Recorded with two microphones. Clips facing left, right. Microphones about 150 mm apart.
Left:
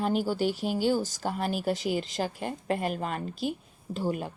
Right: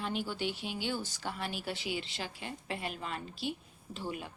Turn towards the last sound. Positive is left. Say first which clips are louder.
# left 9 dB
turn(degrees=45)  # may be behind; listen again after turning